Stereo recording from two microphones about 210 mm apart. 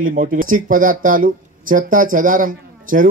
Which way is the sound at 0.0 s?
40° right (ahead or behind).